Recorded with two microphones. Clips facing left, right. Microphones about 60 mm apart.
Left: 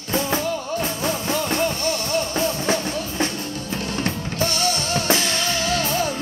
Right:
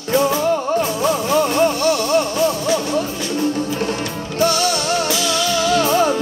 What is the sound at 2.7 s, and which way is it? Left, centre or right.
Music, left.